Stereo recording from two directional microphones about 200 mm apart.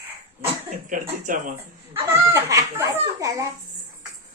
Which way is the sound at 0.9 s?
40° right (ahead or behind).